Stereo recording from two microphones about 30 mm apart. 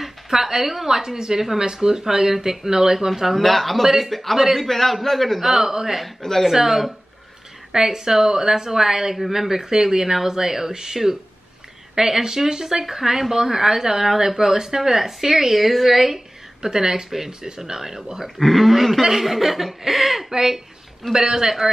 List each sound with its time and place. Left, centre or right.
0.0 s a woman's voice: centre
2.0 s speech: centre
3.3 s speech: centre
3.8 s speech: centre
4.1 s speech: centre
16.6 s a woman's voice: centre
17.6 s speech: centre
18.4 s speech: centre